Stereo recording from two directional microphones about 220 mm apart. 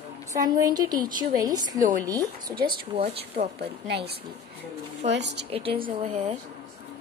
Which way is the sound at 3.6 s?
50° right (ahead or behind).